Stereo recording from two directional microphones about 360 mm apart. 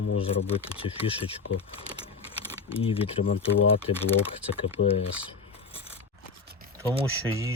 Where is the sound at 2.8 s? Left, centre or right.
Centre.